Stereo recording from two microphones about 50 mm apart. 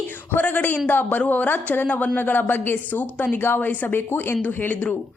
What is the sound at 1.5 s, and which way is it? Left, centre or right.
A woman's voice, left.